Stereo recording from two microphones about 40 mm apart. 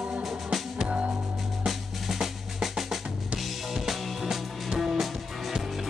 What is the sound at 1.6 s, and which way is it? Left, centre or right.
Drum, centre.